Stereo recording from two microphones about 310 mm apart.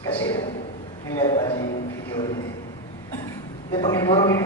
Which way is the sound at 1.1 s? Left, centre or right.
Centre.